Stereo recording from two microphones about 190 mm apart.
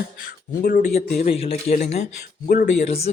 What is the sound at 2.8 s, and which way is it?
Speech, 35° left (ahead or behind).